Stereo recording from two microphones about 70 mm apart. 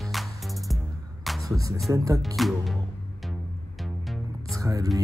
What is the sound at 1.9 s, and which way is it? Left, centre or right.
Speech, right.